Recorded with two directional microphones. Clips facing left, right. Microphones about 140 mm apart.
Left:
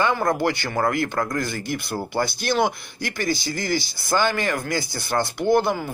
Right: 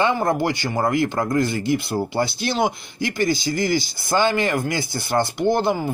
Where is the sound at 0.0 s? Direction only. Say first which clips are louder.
Right 1 dB; 25° right (ahead or behind).